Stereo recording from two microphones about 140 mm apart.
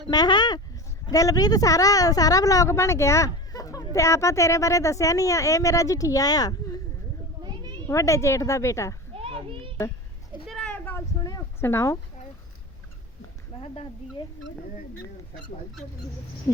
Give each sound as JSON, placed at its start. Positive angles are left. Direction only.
{"t": 0.1, "sound": "speech", "side_deg": 30}
{"t": 7.4, "sound": "cat", "side_deg": -30}
{"t": 7.9, "sound": "speech", "side_deg": 20}
{"t": 9.1, "sound": "children playing", "side_deg": -40}
{"t": 10.4, "sound": "a sound", "side_deg": 0}
{"t": 11.2, "sound": "speech", "side_deg": 25}
{"t": 13.6, "sound": "speech", "side_deg": 40}